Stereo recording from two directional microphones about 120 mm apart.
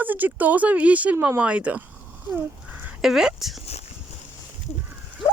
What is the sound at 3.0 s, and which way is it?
Speech, 5° right (ahead or behind).